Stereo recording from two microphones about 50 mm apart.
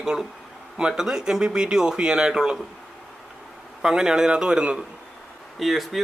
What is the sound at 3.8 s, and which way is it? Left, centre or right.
Speech, centre.